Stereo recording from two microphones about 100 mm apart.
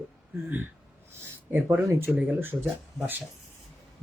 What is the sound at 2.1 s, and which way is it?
Speech, 20° right (ahead or behind).